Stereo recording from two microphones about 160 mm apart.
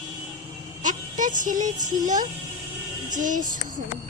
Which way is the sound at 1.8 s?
55° right (ahead or behind).